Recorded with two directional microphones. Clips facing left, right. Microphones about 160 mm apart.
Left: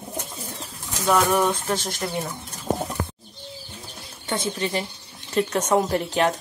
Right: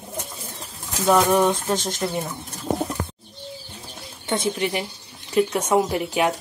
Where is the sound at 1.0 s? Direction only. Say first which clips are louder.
Right 3 dB; 15° right (ahead or behind).